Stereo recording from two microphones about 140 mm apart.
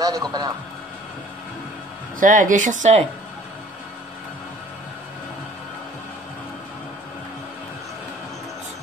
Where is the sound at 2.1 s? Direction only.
70° right (ahead or behind).